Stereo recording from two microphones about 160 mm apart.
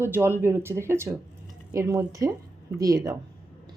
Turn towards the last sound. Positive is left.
turn(degrees=-20)  # may be behind; listen again after turning